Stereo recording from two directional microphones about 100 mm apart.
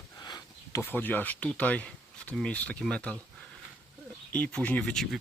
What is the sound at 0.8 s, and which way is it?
Speech, 20° left (ahead or behind).